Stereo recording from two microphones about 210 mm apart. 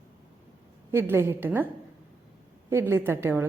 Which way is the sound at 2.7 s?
10° right (ahead or behind).